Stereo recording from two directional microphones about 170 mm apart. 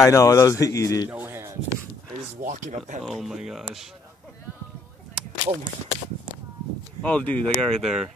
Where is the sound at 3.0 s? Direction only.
Centre (ahead or behind).